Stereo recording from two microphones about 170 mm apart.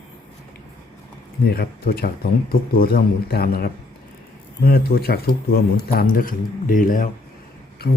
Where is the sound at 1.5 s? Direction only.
65° left (ahead or behind).